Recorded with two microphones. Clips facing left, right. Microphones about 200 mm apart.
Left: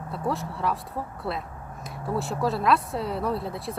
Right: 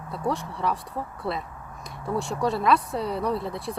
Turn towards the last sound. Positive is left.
turn(degrees=0)  # may be behind; listen again after turning